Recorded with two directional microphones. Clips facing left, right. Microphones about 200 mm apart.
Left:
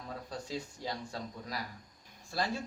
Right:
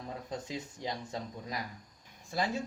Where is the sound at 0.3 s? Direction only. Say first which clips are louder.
Even; 20° right (ahead or behind).